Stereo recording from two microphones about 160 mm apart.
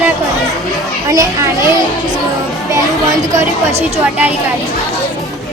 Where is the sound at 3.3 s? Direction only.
40° right (ahead or behind).